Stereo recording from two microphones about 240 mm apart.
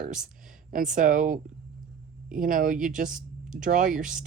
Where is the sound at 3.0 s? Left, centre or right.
Centre.